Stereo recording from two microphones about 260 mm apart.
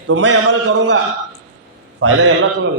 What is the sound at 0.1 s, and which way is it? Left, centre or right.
Speech, right.